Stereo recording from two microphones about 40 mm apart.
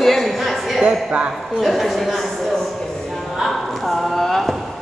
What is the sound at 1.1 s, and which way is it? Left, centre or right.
Speech, right.